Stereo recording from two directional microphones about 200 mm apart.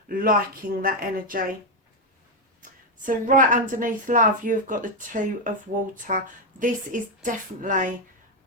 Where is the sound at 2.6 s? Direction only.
40° right (ahead or behind).